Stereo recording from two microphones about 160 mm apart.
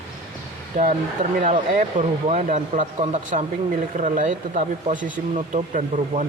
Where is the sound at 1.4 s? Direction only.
50° right (ahead or behind).